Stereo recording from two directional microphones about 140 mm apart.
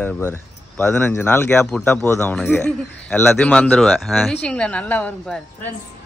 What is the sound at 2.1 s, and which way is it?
Speech, 15° left (ahead or behind).